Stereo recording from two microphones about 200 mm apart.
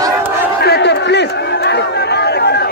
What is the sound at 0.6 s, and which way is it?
Crowd, 55° left (ahead or behind).